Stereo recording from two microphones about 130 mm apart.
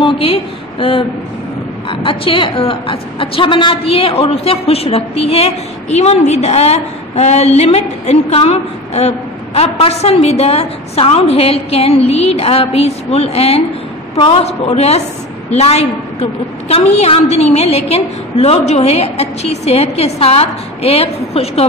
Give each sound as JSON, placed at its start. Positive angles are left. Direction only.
{"t": 0.0, "sound": "a woman's voice", "side_deg": 45}